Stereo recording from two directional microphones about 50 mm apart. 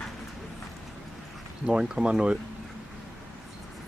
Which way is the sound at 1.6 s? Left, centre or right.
Centre.